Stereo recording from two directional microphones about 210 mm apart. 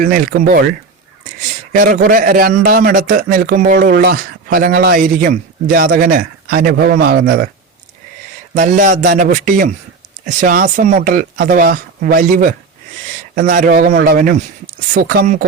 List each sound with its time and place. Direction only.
0.0 s a man's voice: 40° right (ahead or behind)
8.5 s speech: 35° right (ahead or behind)